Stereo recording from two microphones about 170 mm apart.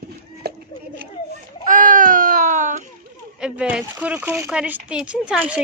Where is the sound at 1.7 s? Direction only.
50° right (ahead or behind).